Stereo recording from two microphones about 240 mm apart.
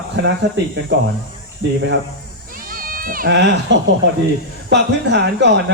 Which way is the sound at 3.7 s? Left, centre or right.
Right.